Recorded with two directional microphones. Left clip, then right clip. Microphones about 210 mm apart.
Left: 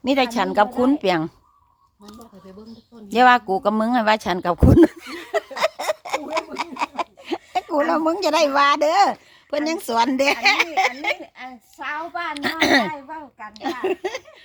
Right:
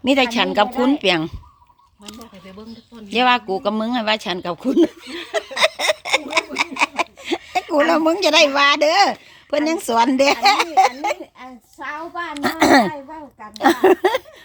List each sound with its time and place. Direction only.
0.0 s speech: 5° right (ahead or behind)
3.1 s speech: 10° left (ahead or behind)
5.4 s a sound: centre (ahead or behind)
11.0 s a woman's voice: centre (ahead or behind)
12.3 s speech: 10° right (ahead or behind)
13.8 s speech: 25° right (ahead or behind)